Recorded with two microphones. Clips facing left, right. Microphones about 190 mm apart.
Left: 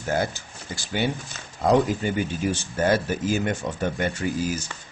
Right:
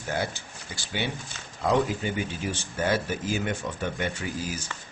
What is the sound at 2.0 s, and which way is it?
Speech, 45° left (ahead or behind).